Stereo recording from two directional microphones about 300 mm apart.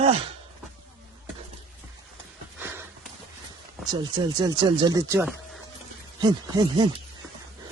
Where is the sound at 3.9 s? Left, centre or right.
Centre.